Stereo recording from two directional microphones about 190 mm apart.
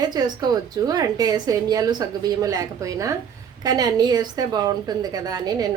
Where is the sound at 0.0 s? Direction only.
20° right (ahead or behind).